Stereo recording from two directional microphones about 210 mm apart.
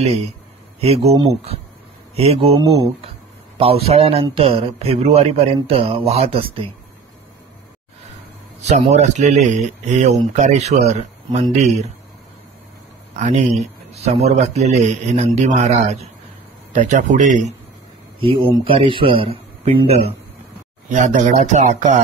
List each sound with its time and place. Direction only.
0.0 s a man's voice: 30° right (ahead or behind)
8.6 s speech: 35° right (ahead or behind)
13.1 s speech: 30° right (ahead or behind)
18.2 s a man's voice: 25° right (ahead or behind)